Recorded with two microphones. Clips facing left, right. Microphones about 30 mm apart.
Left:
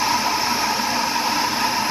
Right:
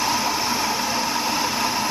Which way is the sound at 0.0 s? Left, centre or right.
Centre.